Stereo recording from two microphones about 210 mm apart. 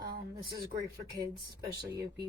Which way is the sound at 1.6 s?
20° right (ahead or behind).